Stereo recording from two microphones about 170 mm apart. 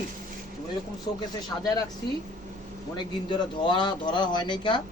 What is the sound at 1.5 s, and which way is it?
Speech, 15° left (ahead or behind).